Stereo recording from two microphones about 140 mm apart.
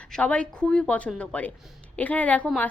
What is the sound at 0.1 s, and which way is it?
Speech, 10° left (ahead or behind).